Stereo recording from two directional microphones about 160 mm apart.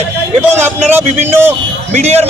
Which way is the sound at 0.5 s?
15° right (ahead or behind).